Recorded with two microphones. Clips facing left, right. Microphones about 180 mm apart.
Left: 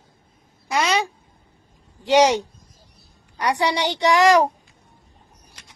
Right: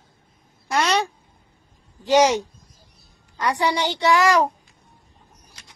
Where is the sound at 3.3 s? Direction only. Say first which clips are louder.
Left 1 dB; 15° left (ahead or behind).